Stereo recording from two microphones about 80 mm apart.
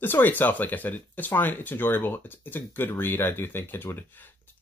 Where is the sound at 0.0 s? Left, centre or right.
Left.